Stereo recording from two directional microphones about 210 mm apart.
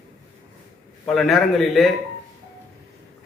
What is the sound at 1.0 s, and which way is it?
Speech, centre (ahead or behind).